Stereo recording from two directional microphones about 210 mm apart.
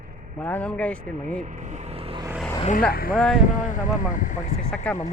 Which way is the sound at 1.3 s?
35° right (ahead or behind).